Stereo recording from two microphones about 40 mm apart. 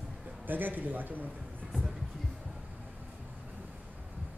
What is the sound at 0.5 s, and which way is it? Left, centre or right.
Speech, right.